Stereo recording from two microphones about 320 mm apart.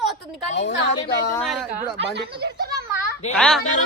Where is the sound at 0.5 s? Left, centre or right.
Left.